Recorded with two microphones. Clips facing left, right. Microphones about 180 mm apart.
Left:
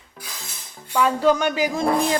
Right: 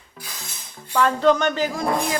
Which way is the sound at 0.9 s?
10° left (ahead or behind).